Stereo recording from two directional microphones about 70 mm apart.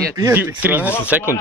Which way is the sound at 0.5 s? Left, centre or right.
Right.